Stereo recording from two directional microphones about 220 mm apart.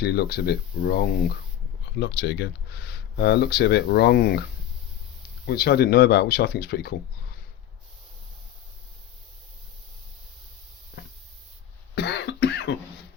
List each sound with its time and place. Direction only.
0.0 s speech: 45° left (ahead or behind)
2.0 s speech: 50° left (ahead or behind)
5.5 s speech: 45° left (ahead or behind)
11.0 s a sound: 45° left (ahead or behind)
11.9 s cough: 50° left (ahead or behind)